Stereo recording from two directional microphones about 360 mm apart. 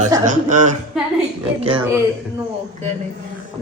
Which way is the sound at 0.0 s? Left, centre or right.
Centre.